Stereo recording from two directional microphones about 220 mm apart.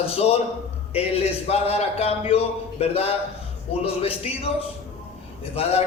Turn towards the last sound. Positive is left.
turn(degrees=25)  # may be behind; listen again after turning